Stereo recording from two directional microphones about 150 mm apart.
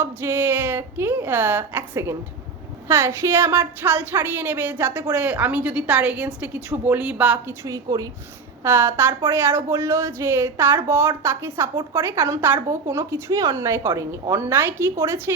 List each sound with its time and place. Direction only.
0.0 s a woman's voice: 15° right (ahead or behind)